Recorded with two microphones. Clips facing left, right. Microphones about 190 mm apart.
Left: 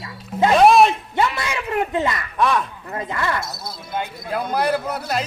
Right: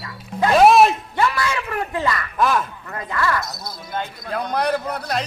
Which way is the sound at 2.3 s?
Centre (ahead or behind).